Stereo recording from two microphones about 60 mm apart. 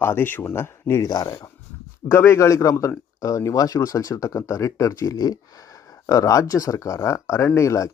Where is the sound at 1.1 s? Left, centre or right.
Left.